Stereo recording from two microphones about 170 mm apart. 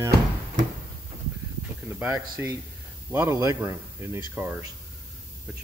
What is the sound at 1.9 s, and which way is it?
Speech, 10° right (ahead or behind).